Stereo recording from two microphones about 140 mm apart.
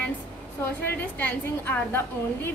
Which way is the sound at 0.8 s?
15° left (ahead or behind).